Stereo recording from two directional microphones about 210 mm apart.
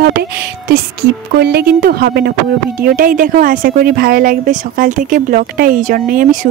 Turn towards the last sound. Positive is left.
turn(degrees=-40)  # may be behind; listen again after turning